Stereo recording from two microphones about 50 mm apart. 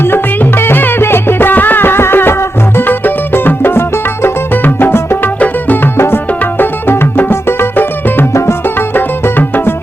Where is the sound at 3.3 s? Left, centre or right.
Left.